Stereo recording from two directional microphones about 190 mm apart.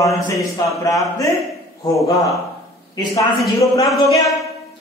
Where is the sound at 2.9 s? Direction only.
25° left (ahead or behind).